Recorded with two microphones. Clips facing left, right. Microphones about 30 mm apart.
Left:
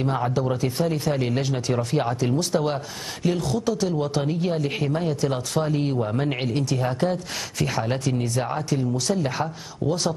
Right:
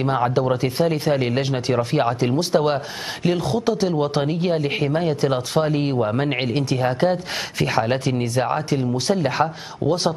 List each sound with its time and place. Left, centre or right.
0.0 s speech: right